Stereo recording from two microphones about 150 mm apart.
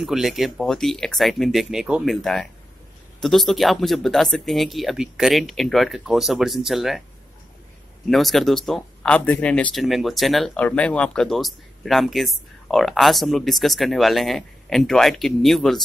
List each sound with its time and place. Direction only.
0.0 s speech: centre (ahead or behind)
8.1 s speech: centre (ahead or behind)